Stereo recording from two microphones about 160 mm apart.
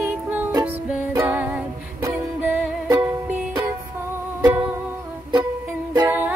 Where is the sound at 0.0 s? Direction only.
10° right (ahead or behind).